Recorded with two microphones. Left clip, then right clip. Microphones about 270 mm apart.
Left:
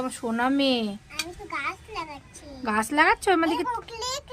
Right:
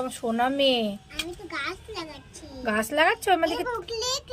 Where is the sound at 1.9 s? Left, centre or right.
Centre.